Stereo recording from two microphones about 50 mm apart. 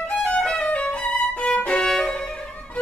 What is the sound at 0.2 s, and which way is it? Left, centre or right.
Violin, left.